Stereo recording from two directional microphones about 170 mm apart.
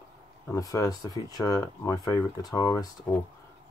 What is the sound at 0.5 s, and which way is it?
Speech, 20° left (ahead or behind).